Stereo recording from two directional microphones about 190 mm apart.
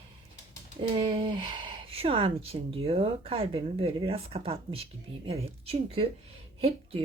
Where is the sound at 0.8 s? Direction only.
25° right (ahead or behind).